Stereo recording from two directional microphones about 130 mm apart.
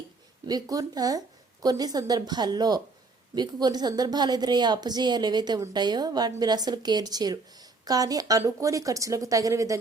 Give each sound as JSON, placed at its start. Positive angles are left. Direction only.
{"t": 0.4, "sound": "a woman's voice", "side_deg": -30}